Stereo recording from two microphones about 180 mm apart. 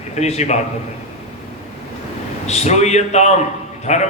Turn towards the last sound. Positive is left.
turn(degrees=40)  # may be behind; listen again after turning